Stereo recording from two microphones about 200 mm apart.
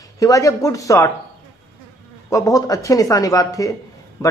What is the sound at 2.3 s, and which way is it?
Speech, 15° left (ahead or behind).